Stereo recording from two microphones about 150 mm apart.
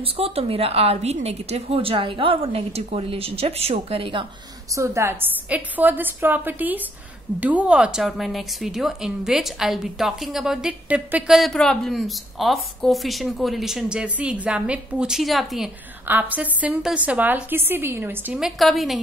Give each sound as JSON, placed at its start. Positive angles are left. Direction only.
{"t": 0.0, "sound": "a woman's voice", "side_deg": -40}
{"t": 4.7, "sound": "a woman's voice", "side_deg": -20}
{"t": 16.1, "sound": "a woman's voice", "side_deg": -10}
{"t": 18.6, "sound": "speech", "side_deg": 0}